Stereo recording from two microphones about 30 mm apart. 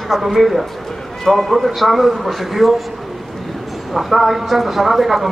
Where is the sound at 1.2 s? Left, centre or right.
Centre.